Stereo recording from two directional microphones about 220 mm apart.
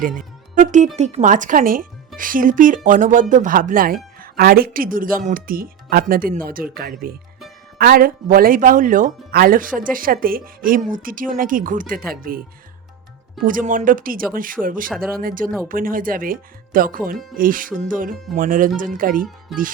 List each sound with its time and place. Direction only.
0.2 s speech: 35° right (ahead or behind)
13.4 s speech: 40° right (ahead or behind)